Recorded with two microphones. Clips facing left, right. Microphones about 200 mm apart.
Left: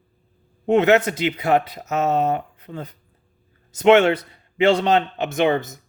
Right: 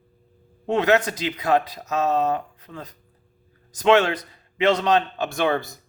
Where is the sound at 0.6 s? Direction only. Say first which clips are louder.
Left 4 dB; 25° left (ahead or behind).